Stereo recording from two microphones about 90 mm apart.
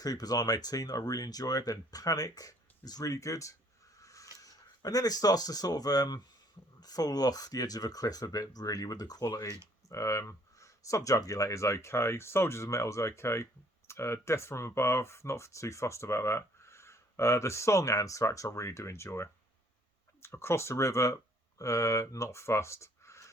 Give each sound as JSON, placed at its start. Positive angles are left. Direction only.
{"t": 0.0, "sound": "speech", "side_deg": 45}